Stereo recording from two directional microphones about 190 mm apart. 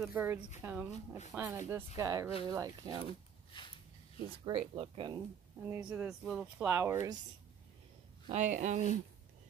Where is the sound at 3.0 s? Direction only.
25° left (ahead or behind).